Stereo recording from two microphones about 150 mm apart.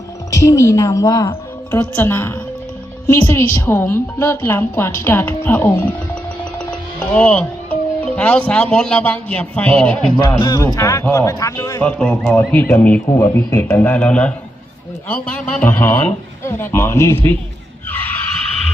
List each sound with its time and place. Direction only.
0.3 s speech: 20° left (ahead or behind)
1.8 s a woman's voice: 15° left (ahead or behind)
10.4 s a man's voice: 25° left (ahead or behind)
11.9 s a woman's voice: 10° left (ahead or behind)
17.8 s skidding: 10° left (ahead or behind)